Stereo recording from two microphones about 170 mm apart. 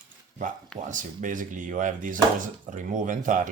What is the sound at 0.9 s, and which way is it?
Speech, 50° right (ahead or behind).